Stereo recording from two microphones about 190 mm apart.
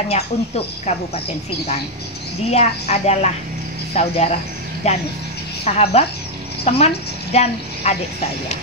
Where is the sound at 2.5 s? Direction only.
35° left (ahead or behind).